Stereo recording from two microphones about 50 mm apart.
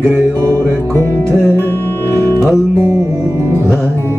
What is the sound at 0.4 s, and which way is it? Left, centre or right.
Music, right.